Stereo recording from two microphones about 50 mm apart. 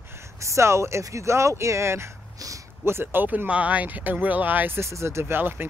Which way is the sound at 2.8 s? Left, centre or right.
Right.